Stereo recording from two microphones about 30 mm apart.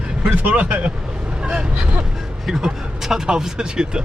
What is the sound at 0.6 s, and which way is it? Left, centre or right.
Speech, right.